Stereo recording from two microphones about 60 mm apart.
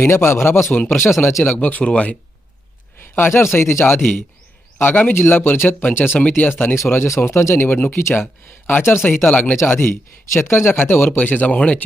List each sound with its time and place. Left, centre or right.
0.0 s speech: left
1.5 s speech: left
3.0 s speech: left
4.8 s speech: left
9.6 s speech: left